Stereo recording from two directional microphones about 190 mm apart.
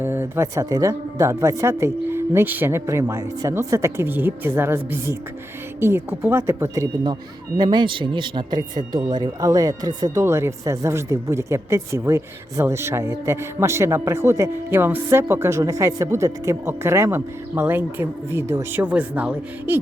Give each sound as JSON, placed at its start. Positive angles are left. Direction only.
{"t": 0.0, "sound": "speech", "side_deg": -10}